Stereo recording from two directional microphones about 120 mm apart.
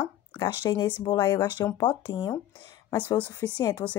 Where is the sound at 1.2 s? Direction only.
25° left (ahead or behind).